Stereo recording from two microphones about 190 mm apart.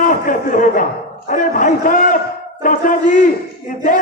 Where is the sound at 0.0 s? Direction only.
45° left (ahead or behind).